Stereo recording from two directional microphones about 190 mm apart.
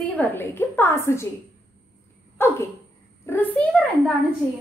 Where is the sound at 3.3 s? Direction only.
10° left (ahead or behind).